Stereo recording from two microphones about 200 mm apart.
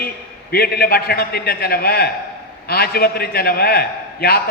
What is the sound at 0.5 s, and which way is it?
A man's voice, 50° left (ahead or behind).